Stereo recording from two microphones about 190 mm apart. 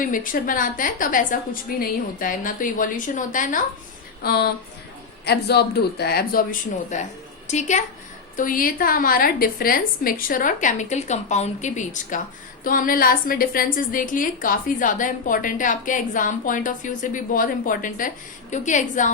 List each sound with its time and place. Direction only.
0.0 s a woman's voice: 45° left (ahead or behind)
4.2 s a woman's voice: 55° left (ahead or behind)